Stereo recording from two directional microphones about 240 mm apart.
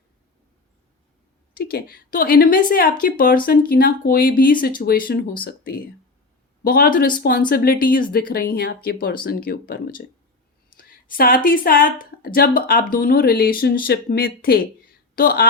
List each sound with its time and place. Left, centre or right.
1.5 s a woman's voice: left